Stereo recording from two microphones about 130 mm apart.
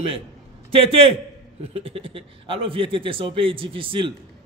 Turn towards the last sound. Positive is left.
turn(degrees=-40)  # may be behind; listen again after turning